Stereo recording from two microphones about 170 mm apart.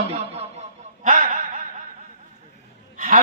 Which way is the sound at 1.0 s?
50° right (ahead or behind).